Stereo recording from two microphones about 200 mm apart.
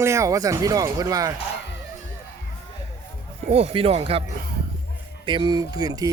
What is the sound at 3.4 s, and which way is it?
Speech, 30° right (ahead or behind).